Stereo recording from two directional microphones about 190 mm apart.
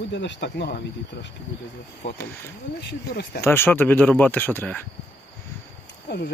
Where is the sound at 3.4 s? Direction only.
10° left (ahead or behind).